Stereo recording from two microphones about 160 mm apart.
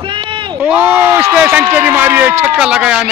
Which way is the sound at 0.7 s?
10° right (ahead or behind).